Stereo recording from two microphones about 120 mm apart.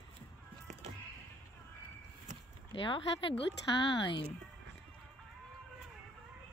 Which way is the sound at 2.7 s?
45° left (ahead or behind).